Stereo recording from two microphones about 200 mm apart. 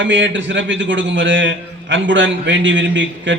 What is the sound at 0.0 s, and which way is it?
A man's voice, 65° right (ahead or behind).